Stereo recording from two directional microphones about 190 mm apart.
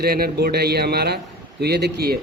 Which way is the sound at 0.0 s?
55° right (ahead or behind).